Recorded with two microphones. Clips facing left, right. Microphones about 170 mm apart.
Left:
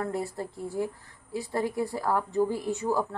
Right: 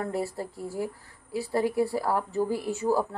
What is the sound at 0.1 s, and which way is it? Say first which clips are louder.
A woman's voice: right 1 dB; 10° right (ahead or behind).